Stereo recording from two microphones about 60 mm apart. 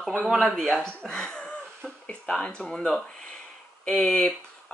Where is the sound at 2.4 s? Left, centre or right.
Centre.